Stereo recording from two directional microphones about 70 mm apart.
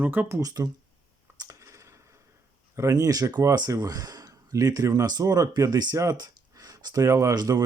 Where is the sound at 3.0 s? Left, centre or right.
Right.